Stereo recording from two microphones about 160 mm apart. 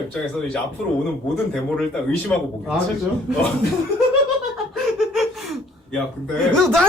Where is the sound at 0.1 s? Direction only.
5° left (ahead or behind).